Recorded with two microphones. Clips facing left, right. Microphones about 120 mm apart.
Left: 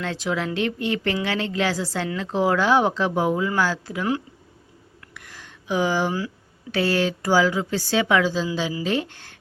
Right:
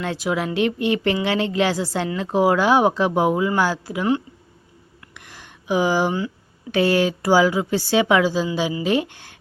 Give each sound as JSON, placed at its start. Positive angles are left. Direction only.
{"t": 0.0, "sound": "speech", "side_deg": -15}
{"t": 5.1, "sound": "a sound", "side_deg": -20}
{"t": 6.7, "sound": "speech", "side_deg": -15}